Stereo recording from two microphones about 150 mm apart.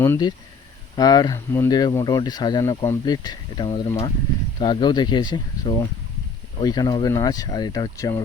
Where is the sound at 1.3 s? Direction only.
15° left (ahead or behind).